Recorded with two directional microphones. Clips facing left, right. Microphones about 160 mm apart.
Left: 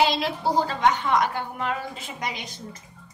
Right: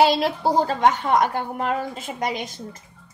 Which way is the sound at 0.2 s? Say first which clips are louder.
Right 3 dB; 45° right (ahead or behind).